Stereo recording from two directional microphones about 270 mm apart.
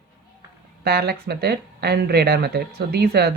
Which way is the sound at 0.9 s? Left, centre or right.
Right.